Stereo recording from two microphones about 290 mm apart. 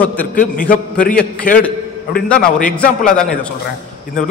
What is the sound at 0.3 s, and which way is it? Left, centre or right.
Speech, left.